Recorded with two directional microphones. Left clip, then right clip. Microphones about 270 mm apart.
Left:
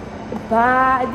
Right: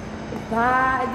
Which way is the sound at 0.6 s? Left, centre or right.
Left.